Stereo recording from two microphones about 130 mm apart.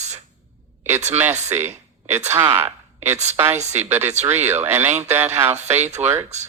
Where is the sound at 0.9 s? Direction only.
60° right (ahead or behind).